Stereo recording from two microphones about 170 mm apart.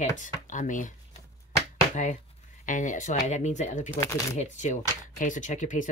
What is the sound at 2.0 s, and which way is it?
Speech, 45° left (ahead or behind).